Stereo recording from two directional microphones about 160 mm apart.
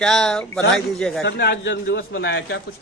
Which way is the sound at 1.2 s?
90° left.